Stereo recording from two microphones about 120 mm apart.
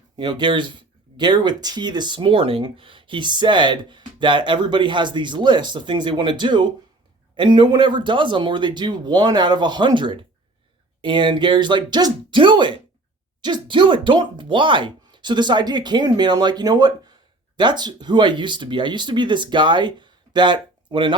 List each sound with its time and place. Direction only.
0.2 s speech: 40° right (ahead or behind)